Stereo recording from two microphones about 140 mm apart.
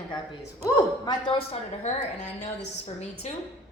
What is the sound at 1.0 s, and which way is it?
A woman's voice, 35° left (ahead or behind).